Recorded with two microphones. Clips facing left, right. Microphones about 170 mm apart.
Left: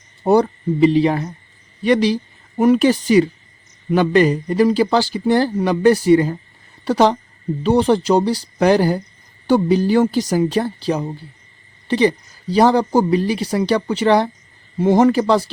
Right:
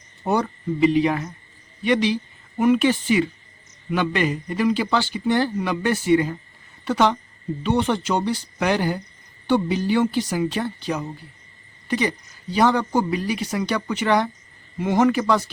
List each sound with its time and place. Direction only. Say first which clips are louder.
0.3 s speech: left 8 dB; 35° left (ahead or behind)